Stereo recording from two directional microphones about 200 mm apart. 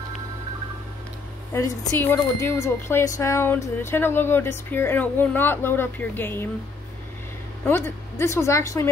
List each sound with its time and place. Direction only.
1.5 s speech: 10° left (ahead or behind)
7.6 s speech: 10° left (ahead or behind)